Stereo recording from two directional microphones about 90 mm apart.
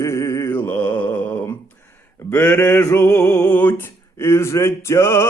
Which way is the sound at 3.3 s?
15° left (ahead or behind).